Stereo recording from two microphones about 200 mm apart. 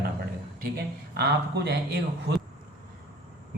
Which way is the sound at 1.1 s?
55° right (ahead or behind).